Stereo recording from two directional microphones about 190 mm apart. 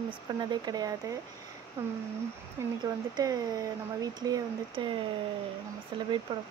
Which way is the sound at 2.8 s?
20° right (ahead or behind).